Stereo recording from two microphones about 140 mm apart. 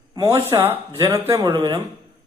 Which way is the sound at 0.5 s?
30° right (ahead or behind).